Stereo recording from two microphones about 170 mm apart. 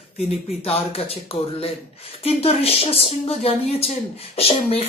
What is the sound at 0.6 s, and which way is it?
Speech, 35° left (ahead or behind).